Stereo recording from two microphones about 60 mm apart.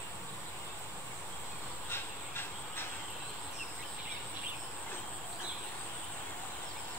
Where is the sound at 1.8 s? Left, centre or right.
Left.